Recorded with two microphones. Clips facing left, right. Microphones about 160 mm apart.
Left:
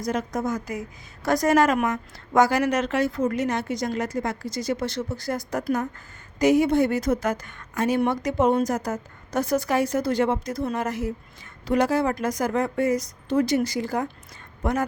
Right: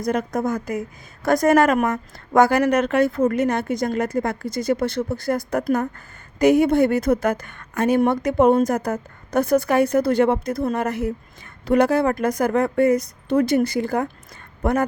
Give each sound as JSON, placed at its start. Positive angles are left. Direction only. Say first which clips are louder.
{"t": 0.0, "sound": "a woman's voice", "louder": "right 4 dB", "side_deg": -55}